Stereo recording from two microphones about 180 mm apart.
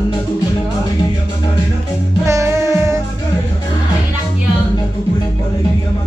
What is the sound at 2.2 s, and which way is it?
Music, 15° right (ahead or behind).